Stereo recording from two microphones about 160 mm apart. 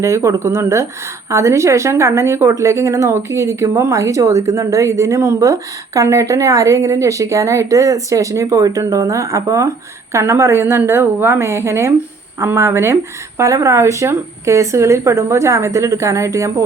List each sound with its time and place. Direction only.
0.0 s a woman's voice: 20° right (ahead or behind)